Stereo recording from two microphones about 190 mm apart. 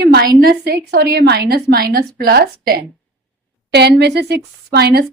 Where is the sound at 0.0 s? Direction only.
55° right (ahead or behind).